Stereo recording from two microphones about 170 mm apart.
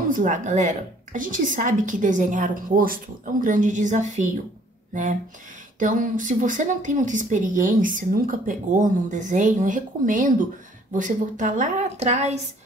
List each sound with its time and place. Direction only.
0.1 s a woman's voice: 50° right (ahead or behind)
5.8 s a woman's voice: 50° right (ahead or behind)